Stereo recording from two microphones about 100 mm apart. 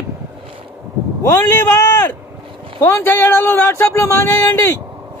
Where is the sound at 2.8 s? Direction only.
20° left (ahead or behind).